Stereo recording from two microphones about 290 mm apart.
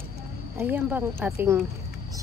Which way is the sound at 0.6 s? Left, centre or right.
Centre.